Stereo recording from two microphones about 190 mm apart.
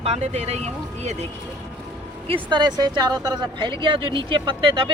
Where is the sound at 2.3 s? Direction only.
25° right (ahead or behind).